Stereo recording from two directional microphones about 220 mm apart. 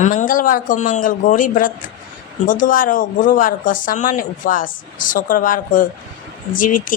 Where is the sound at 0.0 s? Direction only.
35° left (ahead or behind).